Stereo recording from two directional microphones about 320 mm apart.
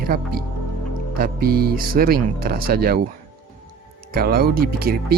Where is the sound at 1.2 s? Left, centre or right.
Right.